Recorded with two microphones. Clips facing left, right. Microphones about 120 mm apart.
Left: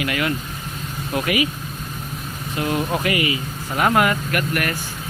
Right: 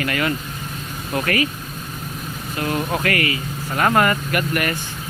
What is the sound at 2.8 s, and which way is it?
Speech, 5° left (ahead or behind).